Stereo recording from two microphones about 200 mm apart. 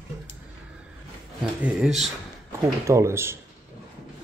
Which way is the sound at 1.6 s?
5° right (ahead or behind).